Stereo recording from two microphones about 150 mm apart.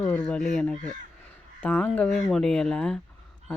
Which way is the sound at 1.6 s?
10° left (ahead or behind).